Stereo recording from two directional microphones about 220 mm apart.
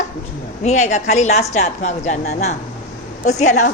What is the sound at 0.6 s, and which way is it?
A woman's voice, 30° left (ahead or behind).